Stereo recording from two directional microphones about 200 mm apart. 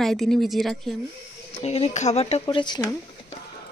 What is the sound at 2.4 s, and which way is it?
Speech, 20° left (ahead or behind).